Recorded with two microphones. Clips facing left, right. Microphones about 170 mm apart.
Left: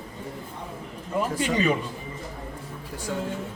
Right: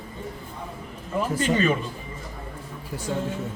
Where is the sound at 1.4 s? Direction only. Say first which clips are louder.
Right 2 dB; 15° left (ahead or behind).